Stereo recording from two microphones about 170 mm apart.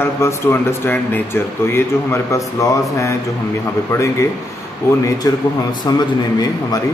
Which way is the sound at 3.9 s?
15° left (ahead or behind).